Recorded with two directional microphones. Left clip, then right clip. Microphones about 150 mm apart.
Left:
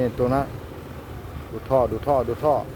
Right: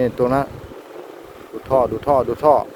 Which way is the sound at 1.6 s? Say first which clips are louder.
Right 3 dB; 15° right (ahead or behind).